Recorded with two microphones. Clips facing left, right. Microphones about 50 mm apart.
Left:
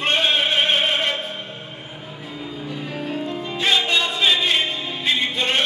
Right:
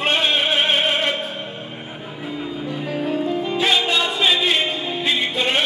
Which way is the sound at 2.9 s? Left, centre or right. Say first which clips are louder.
Right 6 dB; centre.